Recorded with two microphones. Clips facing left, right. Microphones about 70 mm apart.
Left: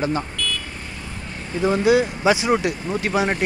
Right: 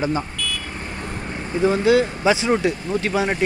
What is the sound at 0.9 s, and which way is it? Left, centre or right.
Vehicle, right.